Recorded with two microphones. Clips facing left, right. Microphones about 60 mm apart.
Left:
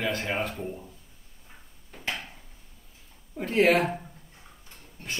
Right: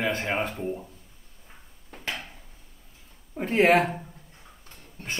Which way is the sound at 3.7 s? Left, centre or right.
Centre.